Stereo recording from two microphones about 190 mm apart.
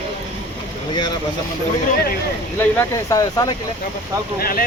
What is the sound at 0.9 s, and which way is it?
Speech, 25° left (ahead or behind).